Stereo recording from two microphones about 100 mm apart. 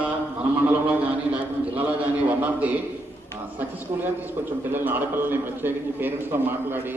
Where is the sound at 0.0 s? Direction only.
15° right (ahead or behind).